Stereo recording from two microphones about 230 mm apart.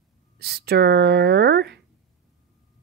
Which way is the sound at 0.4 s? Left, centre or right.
Right.